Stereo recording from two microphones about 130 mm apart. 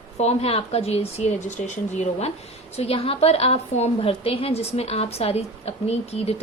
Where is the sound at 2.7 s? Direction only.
50° left (ahead or behind).